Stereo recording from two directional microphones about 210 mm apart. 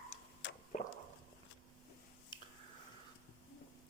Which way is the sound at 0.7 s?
35° left (ahead or behind).